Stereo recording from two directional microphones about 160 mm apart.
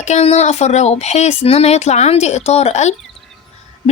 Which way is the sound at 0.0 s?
45° left (ahead or behind).